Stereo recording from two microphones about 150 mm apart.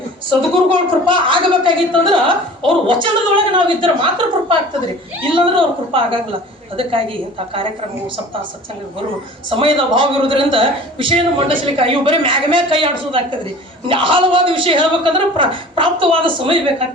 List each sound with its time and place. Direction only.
0.3 s a woman's voice: 35° right (ahead or behind)
9.5 s a woman's voice: 35° right (ahead or behind)